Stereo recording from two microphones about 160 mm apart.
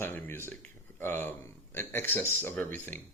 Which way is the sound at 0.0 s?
15° left (ahead or behind).